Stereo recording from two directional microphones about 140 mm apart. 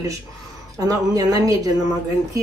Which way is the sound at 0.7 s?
25° right (ahead or behind).